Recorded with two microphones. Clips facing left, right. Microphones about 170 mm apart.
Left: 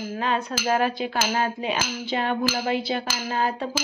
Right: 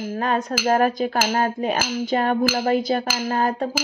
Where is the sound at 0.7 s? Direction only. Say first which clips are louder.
Right 4 dB; 45° right (ahead or behind).